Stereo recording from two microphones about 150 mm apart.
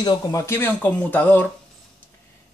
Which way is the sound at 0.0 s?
25° left (ahead or behind).